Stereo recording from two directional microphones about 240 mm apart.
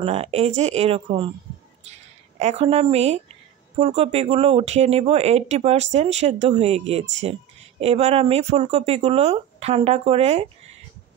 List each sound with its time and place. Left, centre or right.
0.0 s speech: right